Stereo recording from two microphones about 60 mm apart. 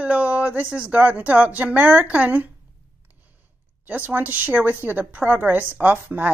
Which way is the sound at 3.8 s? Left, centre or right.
Right.